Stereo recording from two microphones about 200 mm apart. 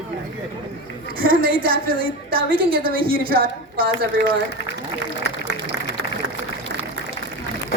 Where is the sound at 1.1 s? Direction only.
45° right (ahead or behind).